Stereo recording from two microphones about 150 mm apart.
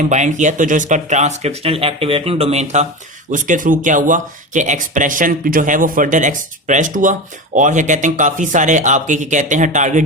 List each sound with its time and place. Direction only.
0.0 s speech: 55° right (ahead or behind)
3.3 s speech: 60° right (ahead or behind)